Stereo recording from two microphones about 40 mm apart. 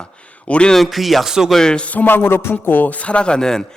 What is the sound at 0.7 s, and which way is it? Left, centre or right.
Speech, centre.